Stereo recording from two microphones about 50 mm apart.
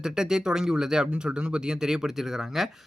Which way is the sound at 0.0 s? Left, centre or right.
Centre.